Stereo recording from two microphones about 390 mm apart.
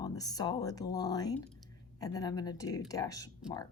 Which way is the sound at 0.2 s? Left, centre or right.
Centre.